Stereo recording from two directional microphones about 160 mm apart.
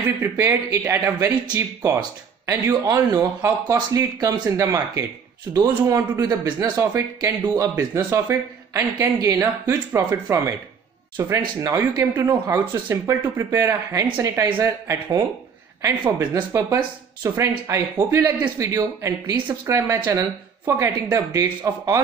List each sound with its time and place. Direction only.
0.2 s speech: 15° right (ahead or behind)